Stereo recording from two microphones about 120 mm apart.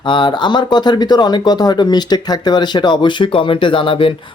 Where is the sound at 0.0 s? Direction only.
40° left (ahead or behind).